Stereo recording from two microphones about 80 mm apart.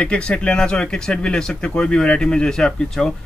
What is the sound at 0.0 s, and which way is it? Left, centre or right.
Speech, centre.